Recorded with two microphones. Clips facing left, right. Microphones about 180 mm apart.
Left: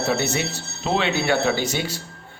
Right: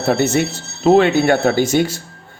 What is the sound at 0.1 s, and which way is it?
Speech, 50° right (ahead or behind).